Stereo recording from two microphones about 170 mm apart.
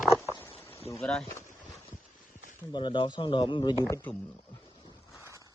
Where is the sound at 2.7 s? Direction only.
30° left (ahead or behind).